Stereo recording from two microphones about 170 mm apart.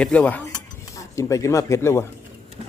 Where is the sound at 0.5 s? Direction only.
20° left (ahead or behind).